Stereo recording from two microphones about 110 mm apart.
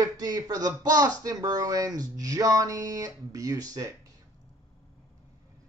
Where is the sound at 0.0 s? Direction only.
35° right (ahead or behind).